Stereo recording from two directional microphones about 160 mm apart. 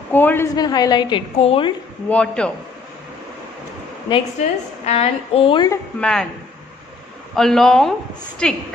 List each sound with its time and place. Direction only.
0.1 s a man's voice: 10° left (ahead or behind)
0.6 s a woman's voice: 25° left (ahead or behind)
2.0 s a man's voice: 5° left (ahead or behind)
4.4 s a woman's voice: 40° left (ahead or behind)
5.9 s speech: 5° left (ahead or behind)
7.3 s speech: centre (ahead or behind)